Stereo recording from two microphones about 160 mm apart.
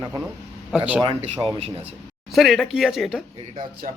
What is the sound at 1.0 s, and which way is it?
Speech, 35° right (ahead or behind).